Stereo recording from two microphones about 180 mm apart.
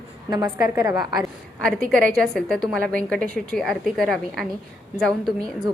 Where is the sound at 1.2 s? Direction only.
5° left (ahead or behind).